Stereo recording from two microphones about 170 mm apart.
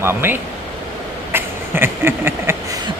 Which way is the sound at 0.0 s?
15° right (ahead or behind).